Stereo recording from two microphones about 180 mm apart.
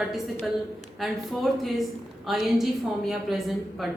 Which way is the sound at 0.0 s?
Centre (ahead or behind).